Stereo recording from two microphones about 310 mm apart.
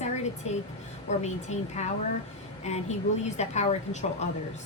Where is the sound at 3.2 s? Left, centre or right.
Left.